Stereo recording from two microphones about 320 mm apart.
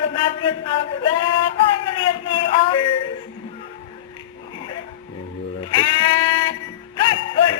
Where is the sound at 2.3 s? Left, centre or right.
Centre.